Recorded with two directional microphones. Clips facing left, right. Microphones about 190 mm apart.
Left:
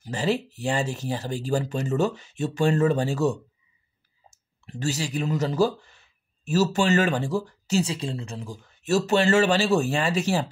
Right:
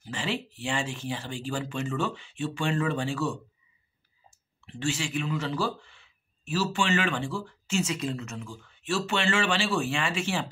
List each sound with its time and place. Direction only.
0.0 s speech: 40° left (ahead or behind)